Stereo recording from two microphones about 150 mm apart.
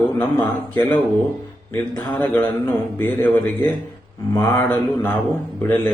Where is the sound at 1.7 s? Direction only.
15° left (ahead or behind).